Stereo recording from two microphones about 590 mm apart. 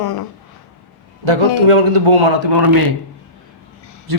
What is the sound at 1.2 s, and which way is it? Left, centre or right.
Speech, right.